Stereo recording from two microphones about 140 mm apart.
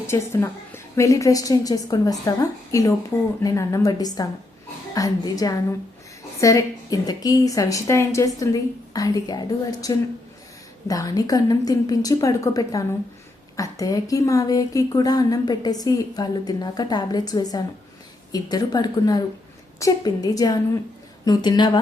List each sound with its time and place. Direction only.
0.1 s a woman's voice: 20° left (ahead or behind)